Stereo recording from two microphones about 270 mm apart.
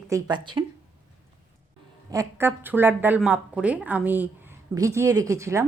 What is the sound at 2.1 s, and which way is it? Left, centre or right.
Speech, centre.